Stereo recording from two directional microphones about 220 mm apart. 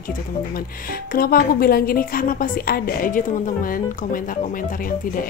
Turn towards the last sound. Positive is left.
turn(degrees=40)  # may be behind; listen again after turning